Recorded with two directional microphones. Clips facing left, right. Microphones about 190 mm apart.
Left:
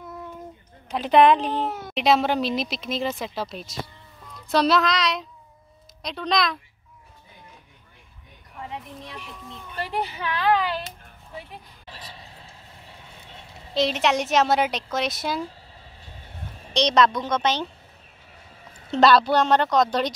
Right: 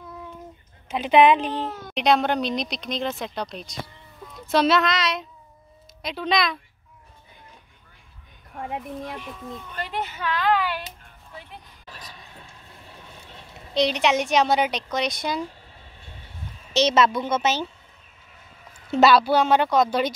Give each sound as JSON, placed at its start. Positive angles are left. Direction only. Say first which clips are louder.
{"t": 0.9, "sound": "speech", "louder": "even", "side_deg": 0}
{"t": 8.5, "sound": "a child's voice", "louder": "right 5 dB", "side_deg": -50}
{"t": 11.8, "sound": "a sound", "louder": "left 1 dB", "side_deg": 30}
{"t": 13.7, "sound": "speech", "louder": "right 1 dB", "side_deg": 0}
{"t": 16.7, "sound": "speech", "louder": "even", "side_deg": -5}
{"t": 18.9, "sound": "speech", "louder": "even", "side_deg": -5}